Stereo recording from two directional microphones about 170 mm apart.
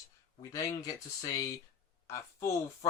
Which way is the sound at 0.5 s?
20° left (ahead or behind).